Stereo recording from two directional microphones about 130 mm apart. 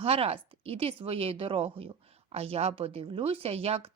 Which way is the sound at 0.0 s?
50° right (ahead or behind).